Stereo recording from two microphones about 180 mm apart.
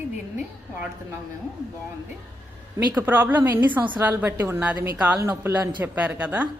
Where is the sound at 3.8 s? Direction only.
25° right (ahead or behind).